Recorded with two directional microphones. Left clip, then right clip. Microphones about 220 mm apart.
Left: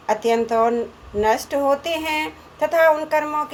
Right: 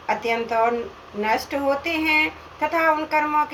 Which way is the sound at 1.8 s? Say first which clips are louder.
Right 3 dB; 45° left (ahead or behind).